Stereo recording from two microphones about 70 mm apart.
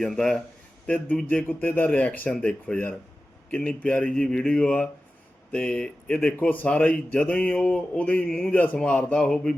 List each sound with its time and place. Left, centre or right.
0.0 s speech: centre
0.9 s speech: left; by 9.6 s centre